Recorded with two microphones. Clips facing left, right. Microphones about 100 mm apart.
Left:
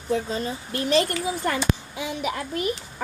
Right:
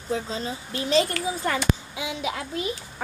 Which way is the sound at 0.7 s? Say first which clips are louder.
Left 1 dB; 55° left (ahead or behind).